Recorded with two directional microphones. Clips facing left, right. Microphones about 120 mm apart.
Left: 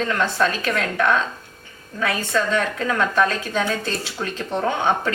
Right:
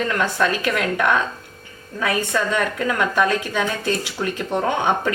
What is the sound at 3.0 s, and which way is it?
A woman's voice, 15° right (ahead or behind).